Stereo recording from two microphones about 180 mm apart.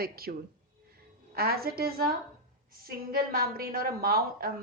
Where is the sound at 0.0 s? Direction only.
55° right (ahead or behind).